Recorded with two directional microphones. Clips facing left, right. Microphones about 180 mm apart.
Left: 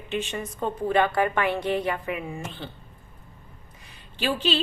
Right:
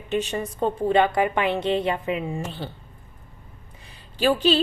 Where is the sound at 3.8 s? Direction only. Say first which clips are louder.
Right 6 dB; 35° right (ahead or behind).